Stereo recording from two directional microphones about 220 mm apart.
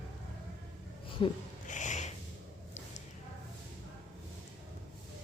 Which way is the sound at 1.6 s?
35° left (ahead or behind).